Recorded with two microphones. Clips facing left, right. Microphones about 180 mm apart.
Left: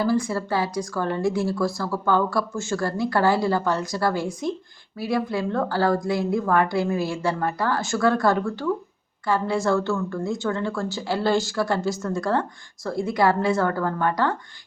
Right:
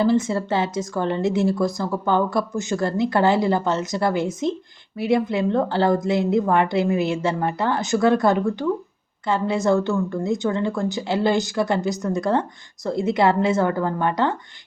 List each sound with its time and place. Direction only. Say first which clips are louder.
0.0 s a woman's voice: right 3 dB; 20° right (ahead or behind)